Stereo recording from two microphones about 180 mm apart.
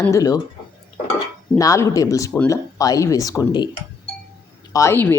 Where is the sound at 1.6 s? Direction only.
20° left (ahead or behind).